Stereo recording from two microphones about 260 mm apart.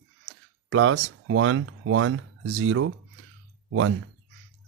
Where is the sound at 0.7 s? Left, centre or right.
Right.